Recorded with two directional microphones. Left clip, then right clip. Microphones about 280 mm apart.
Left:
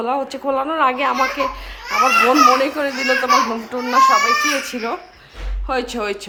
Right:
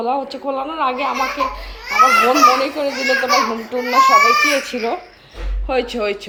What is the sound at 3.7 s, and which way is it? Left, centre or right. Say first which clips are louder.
Speech: even; left.